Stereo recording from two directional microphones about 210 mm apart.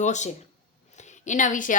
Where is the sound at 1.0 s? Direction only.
35° left (ahead or behind).